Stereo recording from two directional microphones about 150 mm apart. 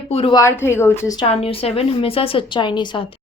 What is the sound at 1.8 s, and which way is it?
Speech, 40° left (ahead or behind).